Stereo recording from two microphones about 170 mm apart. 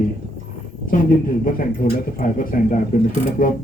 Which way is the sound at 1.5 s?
50° left (ahead or behind).